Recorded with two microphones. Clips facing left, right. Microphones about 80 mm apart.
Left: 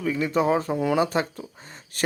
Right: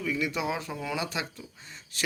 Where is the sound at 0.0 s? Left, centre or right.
Left.